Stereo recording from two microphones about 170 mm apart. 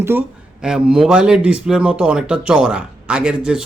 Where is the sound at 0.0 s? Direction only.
10° right (ahead or behind).